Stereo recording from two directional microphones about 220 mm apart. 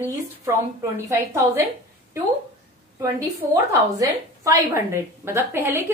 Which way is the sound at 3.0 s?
15° right (ahead or behind).